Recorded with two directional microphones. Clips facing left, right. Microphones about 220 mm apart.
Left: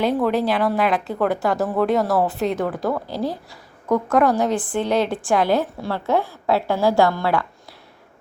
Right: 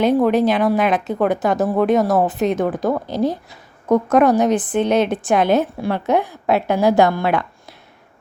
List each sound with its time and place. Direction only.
0.0 s speech: 20° right (ahead or behind)